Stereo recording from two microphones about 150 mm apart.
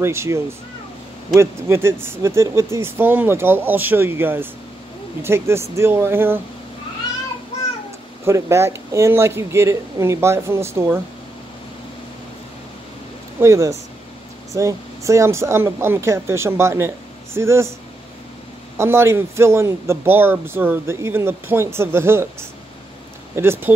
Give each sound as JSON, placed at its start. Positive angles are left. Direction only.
{"t": 0.0, "sound": "a man's voice", "side_deg": -20}
{"t": 8.3, "sound": "a man's voice", "side_deg": -15}
{"t": 13.4, "sound": "a man's voice", "side_deg": -20}
{"t": 18.8, "sound": "a man's voice", "side_deg": -15}
{"t": 23.3, "sound": "a man's voice", "side_deg": -15}